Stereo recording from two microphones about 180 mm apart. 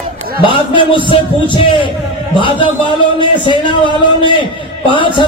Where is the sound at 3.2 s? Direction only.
25° left (ahead or behind).